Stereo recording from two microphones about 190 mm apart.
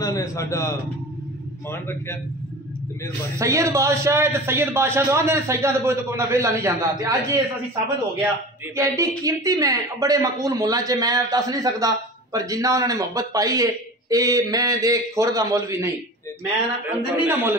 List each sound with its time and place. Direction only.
0.0 s a man's voice: 15° left (ahead or behind)
3.3 s speech: 15° right (ahead or behind)
8.7 s speech: 15° right (ahead or behind)